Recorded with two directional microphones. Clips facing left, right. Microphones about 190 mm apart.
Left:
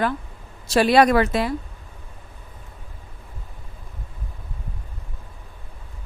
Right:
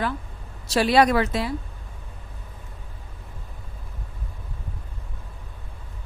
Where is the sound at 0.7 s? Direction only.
55° left (ahead or behind).